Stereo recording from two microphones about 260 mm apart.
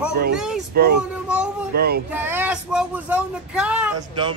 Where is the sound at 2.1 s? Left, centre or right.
Centre.